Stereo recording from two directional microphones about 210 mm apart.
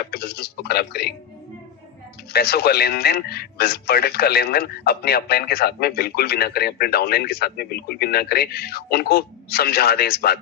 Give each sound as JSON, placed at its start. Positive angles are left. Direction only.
{"t": 0.0, "sound": "speech", "side_deg": 50}
{"t": 2.3, "sound": "a man's voice", "side_deg": 50}